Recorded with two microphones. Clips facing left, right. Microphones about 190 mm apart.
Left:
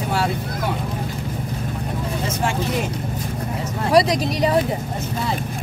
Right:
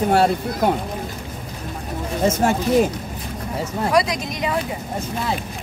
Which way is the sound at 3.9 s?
35° left (ahead or behind).